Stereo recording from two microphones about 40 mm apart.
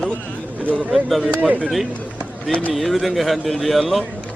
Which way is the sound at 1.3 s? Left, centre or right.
Right.